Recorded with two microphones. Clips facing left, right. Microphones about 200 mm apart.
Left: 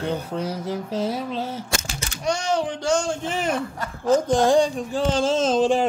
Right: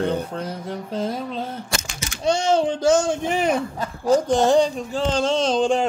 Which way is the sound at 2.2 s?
25° right (ahead or behind).